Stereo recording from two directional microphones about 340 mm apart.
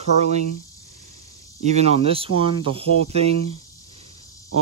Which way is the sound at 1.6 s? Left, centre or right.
Centre.